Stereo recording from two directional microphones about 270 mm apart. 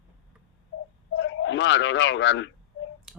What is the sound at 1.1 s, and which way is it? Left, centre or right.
Speech, left.